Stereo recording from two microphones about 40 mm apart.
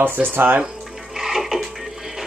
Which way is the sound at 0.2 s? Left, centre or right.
Right.